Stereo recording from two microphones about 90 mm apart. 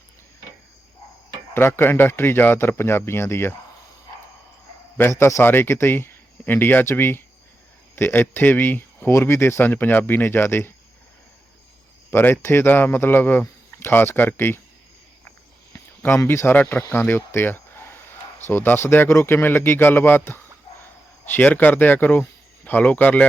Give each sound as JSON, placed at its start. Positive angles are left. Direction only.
{"t": 1.5, "sound": "speech", "side_deg": 25}
{"t": 5.2, "sound": "speech", "side_deg": 25}
{"t": 12.1, "sound": "speech", "side_deg": 25}
{"t": 15.7, "sound": "speech", "side_deg": 30}